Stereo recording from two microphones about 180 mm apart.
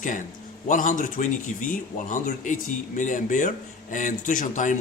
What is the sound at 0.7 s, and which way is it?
Speech, 45° left (ahead or behind).